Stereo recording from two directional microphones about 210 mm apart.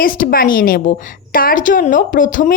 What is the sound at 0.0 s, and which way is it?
A woman's voice, 40° left (ahead or behind).